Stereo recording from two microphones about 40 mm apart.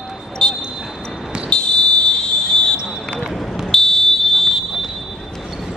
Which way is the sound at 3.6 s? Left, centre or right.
Centre.